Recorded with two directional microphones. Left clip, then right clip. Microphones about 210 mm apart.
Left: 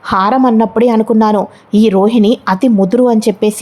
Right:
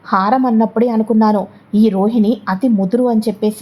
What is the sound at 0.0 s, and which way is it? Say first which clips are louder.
A woman's voice: left 3 dB; 25° left (ahead or behind).